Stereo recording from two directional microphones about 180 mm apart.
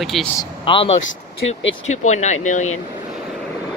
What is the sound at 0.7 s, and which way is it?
Speech, 30° left (ahead or behind).